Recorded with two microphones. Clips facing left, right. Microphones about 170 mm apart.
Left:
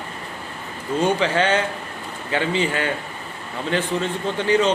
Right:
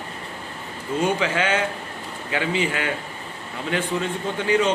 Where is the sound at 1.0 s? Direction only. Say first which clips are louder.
Left 3 dB; 30° left (ahead or behind).